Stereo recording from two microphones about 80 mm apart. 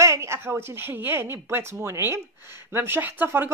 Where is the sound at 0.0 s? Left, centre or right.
Right.